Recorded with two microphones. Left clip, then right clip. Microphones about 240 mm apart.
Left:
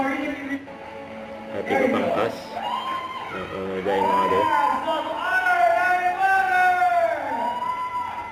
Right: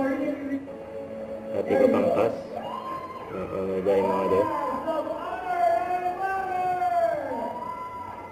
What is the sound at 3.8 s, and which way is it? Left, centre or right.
Speech, left.